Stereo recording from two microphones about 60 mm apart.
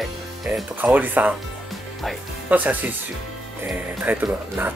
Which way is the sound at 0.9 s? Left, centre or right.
Right.